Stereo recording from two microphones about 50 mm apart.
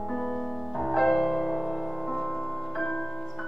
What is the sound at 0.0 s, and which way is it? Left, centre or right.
Music, centre.